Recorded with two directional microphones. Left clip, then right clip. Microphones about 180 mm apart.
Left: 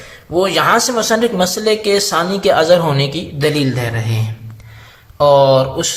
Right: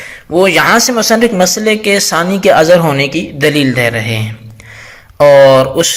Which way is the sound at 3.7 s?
30° right (ahead or behind).